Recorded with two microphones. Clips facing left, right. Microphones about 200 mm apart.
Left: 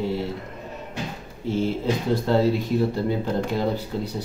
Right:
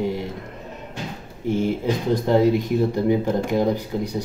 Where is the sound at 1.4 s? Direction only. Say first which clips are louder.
Right 2 dB; 15° right (ahead or behind).